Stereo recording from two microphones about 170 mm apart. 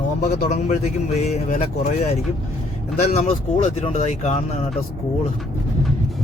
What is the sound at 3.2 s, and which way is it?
A man's voice, 45° left (ahead or behind).